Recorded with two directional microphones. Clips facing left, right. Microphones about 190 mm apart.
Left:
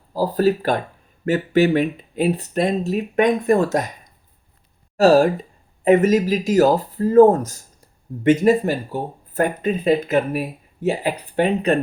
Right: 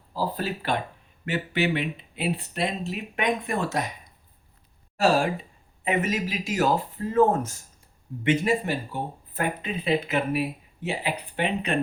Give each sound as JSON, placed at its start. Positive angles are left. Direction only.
{"t": 0.1, "sound": "speech", "side_deg": 40}
{"t": 4.9, "sound": "speech", "side_deg": 40}